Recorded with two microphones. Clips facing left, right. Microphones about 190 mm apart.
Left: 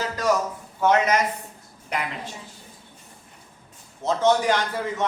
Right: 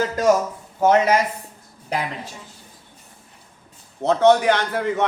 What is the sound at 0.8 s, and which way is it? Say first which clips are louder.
Speech: right 4 dB; 35° right (ahead or behind).